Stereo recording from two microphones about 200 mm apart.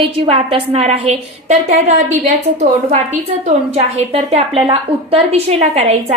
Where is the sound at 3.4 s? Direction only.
35° right (ahead or behind).